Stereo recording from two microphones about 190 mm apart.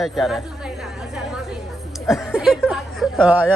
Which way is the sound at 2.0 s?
Centre (ahead or behind).